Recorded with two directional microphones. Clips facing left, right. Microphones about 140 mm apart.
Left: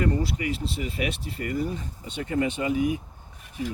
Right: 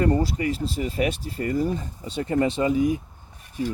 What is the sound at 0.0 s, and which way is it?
Speech, 40° right (ahead or behind).